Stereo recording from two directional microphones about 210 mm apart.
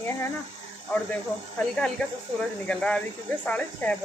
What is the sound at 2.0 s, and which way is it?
Speech, 5° left (ahead or behind).